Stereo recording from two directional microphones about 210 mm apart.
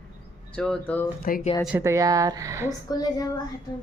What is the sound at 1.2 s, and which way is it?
Speech, 45° left (ahead or behind).